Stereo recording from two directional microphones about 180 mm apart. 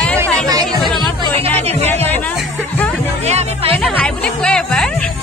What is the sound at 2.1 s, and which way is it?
Music, 5° left (ahead or behind).